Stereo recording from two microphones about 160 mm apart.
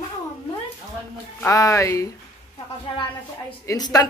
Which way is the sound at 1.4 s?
20° left (ahead or behind).